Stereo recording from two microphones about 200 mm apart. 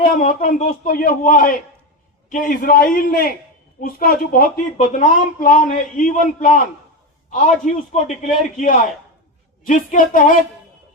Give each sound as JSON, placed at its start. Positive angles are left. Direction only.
{"t": 0.2, "sound": "a man's voice", "side_deg": 40}